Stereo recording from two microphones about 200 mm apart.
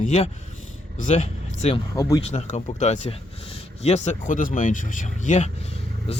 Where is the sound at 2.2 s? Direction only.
35° left (ahead or behind).